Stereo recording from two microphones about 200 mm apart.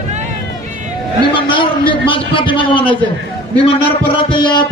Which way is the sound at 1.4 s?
25° left (ahead or behind).